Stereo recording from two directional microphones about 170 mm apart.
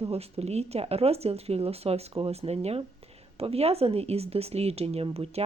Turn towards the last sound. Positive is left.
turn(degrees=-35)  # may be behind; listen again after turning